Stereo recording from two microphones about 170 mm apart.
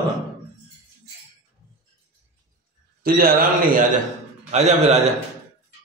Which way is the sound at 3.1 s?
60° right (ahead or behind).